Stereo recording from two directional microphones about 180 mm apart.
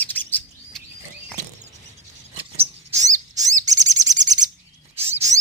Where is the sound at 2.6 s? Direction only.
40° right (ahead or behind).